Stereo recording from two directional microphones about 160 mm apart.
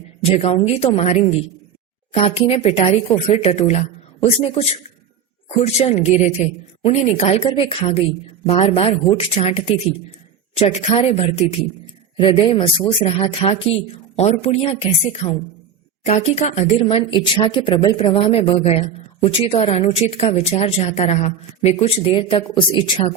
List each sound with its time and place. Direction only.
0.2 s a woman's voice: 40° left (ahead or behind)